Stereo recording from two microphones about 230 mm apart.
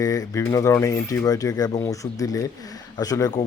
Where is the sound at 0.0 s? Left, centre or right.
Centre.